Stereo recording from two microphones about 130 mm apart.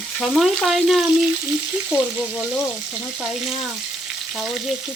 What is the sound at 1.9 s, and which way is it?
Speech, 15° right (ahead or behind).